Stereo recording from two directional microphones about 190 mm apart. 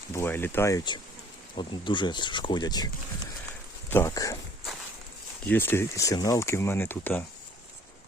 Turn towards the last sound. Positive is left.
turn(degrees=10)  # may be behind; listen again after turning